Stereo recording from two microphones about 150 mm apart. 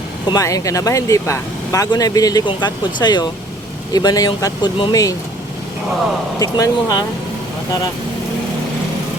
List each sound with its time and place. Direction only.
0.3 s speech: 25° left (ahead or behind)
6.4 s speech: 25° left (ahead or behind)